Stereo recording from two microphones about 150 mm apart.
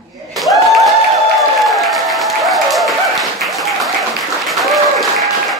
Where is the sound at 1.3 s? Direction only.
Centre (ahead or behind).